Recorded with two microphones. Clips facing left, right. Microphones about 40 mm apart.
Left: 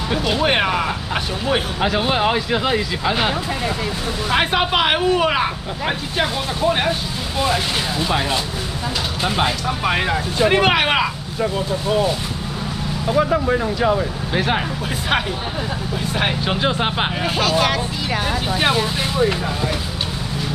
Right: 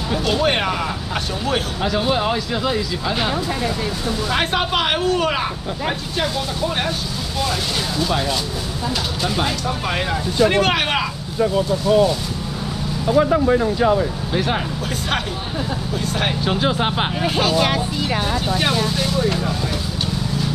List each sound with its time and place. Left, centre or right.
0.2 s speech: centre
14.3 s speech: centre
16.1 s speech: centre
18.5 s speech: centre